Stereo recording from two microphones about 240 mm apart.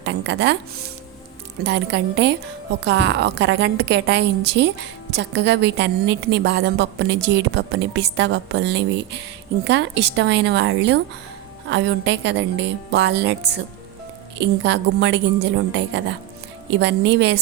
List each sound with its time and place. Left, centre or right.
0.0 s a woman's voice: right
1.6 s a woman's voice: right